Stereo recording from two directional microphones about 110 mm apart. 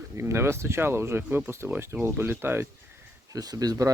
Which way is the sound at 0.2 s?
25° right (ahead or behind).